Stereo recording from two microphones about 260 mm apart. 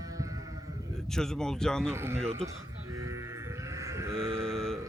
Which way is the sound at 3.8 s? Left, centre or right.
Centre.